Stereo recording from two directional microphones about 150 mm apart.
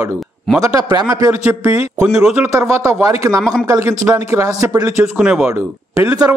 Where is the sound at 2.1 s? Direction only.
5° right (ahead or behind).